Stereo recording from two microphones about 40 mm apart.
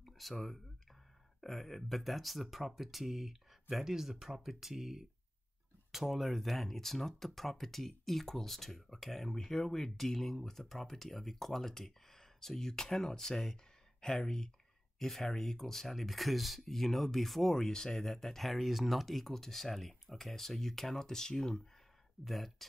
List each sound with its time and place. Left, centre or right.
0.0 s speech: centre
22.2 s speech: centre